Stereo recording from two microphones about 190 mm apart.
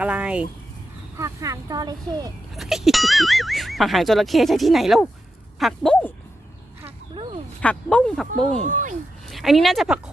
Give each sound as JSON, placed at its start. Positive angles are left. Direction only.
{"t": 0.0, "sound": "speech", "side_deg": -5}
{"t": 1.1, "sound": "speech", "side_deg": -15}
{"t": 2.6, "sound": "speech", "side_deg": 0}
{"t": 6.8, "sound": "a sound", "side_deg": -30}
{"t": 7.6, "sound": "speech", "side_deg": 5}
{"t": 8.4, "sound": "speech", "side_deg": -40}
{"t": 9.2, "sound": "speech", "side_deg": 0}